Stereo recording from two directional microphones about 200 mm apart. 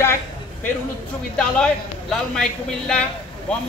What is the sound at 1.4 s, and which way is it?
A man's voice, 5° left (ahead or behind).